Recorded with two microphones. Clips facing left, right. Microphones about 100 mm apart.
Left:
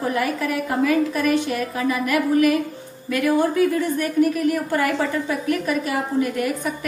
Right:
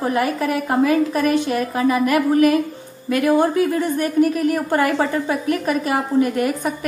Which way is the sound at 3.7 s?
35° right (ahead or behind).